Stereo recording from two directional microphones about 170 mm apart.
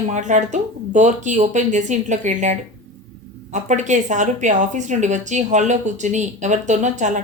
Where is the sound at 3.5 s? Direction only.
45° right (ahead or behind).